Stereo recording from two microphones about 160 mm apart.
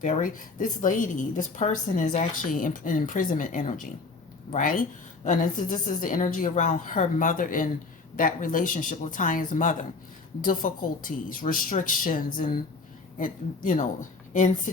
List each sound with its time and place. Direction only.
0.0 s a woman's voice: 50° left (ahead or behind)